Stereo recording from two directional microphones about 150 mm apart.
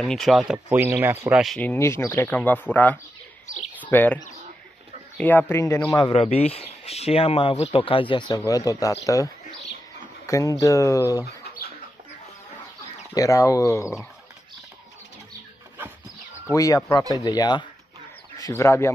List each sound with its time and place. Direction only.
0.0 s speech: centre (ahead or behind); by 1.4 s 15° right (ahead or behind)
1.6 s a man's voice: 15° left (ahead or behind)
6.1 s speech: 45° left (ahead or behind); by 11.2 s 20° left (ahead or behind)
13.1 s speech: 20° left (ahead or behind)
16.5 s a man's voice: 20° left (ahead or behind)